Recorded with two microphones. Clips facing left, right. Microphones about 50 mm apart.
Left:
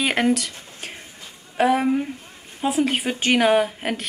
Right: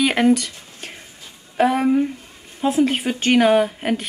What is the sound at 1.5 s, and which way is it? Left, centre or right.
Speech, centre.